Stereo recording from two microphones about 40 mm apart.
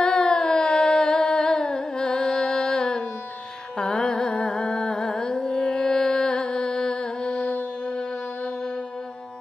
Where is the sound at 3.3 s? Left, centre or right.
Centre.